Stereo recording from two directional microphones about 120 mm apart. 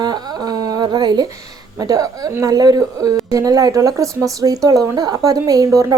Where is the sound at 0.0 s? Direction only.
35° right (ahead or behind).